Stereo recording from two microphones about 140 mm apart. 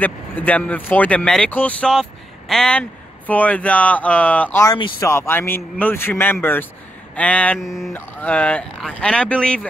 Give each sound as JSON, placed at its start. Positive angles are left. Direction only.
{"t": 0.0, "sound": "speech", "side_deg": 10}
{"t": 7.5, "sound": "mantra", "side_deg": -5}
{"t": 7.9, "sound": "speech", "side_deg": 10}